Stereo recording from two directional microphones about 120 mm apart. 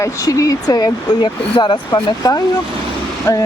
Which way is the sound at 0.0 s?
25° left (ahead or behind).